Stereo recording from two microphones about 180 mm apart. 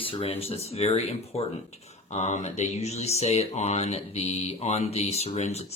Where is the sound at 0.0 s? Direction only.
30° left (ahead or behind).